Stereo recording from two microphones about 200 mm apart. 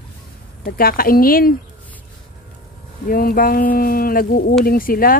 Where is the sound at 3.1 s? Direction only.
45° left (ahead or behind).